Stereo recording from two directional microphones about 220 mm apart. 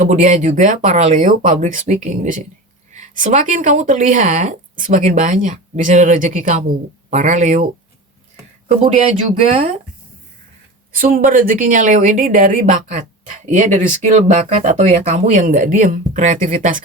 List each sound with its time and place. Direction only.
0.0 s speech: 35° right (ahead or behind)
9.3 s speech: 30° right (ahead or behind)
10.9 s speech: 40° right (ahead or behind)